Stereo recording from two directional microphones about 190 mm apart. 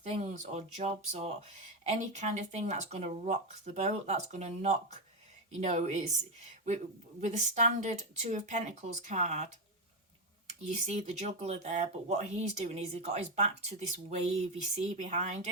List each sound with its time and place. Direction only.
0.1 s speech: 35° right (ahead or behind)
10.8 s speech: 35° right (ahead or behind)